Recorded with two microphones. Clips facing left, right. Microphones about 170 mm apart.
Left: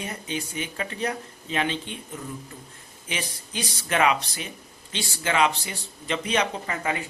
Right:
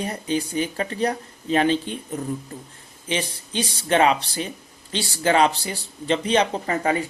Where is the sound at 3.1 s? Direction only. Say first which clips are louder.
Right 6 dB; 30° right (ahead or behind).